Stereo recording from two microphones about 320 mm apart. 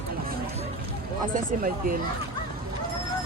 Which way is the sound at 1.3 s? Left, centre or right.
Right.